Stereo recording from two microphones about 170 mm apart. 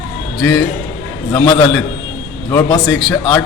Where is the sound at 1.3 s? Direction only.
10° left (ahead or behind).